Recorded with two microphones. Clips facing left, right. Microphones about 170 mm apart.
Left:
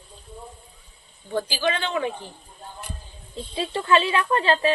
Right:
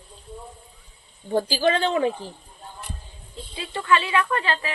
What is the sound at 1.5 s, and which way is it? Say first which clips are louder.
Speech: right 5 dB; 40° right (ahead or behind).